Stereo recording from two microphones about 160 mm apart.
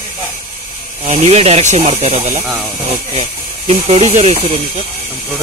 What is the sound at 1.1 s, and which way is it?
Speech, 40° right (ahead or behind).